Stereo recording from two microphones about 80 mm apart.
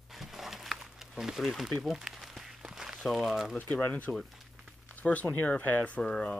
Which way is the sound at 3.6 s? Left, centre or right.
Left.